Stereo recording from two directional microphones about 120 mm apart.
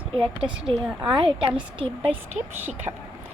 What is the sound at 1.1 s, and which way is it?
Speech, 45° right (ahead or behind).